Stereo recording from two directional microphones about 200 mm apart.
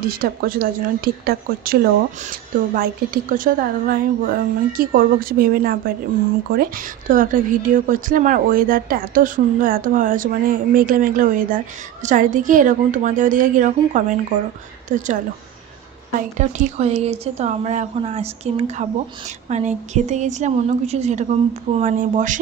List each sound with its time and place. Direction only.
0.1 s a woman's voice: 45° right (ahead or behind)
16.2 s a woman's voice: 40° right (ahead or behind)